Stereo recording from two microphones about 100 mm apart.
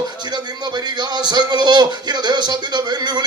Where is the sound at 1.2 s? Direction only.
45° right (ahead or behind).